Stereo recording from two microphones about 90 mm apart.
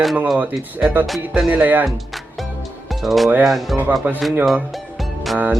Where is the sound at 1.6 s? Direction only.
20° right (ahead or behind).